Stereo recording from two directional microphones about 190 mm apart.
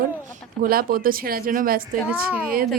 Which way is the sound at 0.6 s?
50° right (ahead or behind).